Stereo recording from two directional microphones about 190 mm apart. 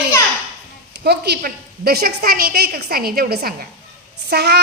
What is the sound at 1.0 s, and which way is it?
A woman's voice, 60° right (ahead or behind).